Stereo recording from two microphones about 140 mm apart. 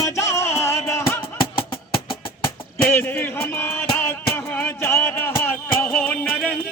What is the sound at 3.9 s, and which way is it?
Music, 15° left (ahead or behind).